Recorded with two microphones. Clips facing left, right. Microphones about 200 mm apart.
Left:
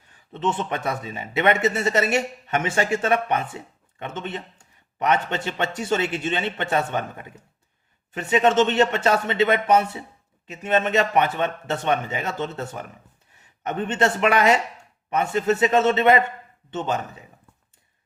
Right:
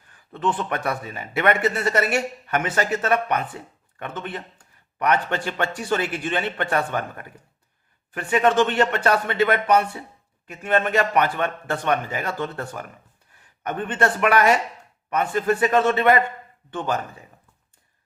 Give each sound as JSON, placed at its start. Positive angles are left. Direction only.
{"t": 0.3, "sound": "speech", "side_deg": 25}